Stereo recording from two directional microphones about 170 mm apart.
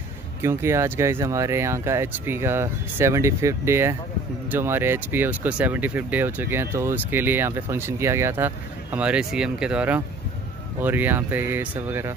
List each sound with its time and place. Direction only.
0.4 s speech: 15° right (ahead or behind)